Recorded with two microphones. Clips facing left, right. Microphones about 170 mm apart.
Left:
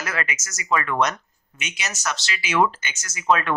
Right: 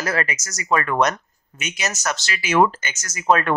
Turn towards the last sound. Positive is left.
turn(degrees=-40)  # may be behind; listen again after turning